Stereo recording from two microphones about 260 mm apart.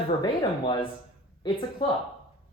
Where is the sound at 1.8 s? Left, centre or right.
Centre.